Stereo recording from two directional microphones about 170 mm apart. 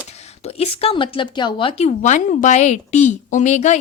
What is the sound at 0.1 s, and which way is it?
A woman's voice, 40° left (ahead or behind).